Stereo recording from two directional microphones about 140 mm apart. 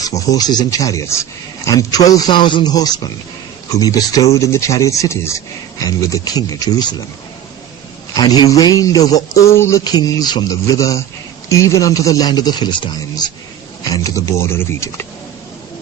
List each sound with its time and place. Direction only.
0.2 s speech: 30° left (ahead or behind)
8.1 s speech: 30° left (ahead or behind)